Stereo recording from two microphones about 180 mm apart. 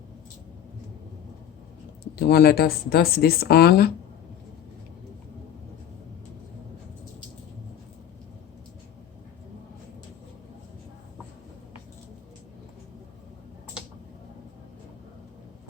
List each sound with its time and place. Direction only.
2.1 s speech: 60° left (ahead or behind)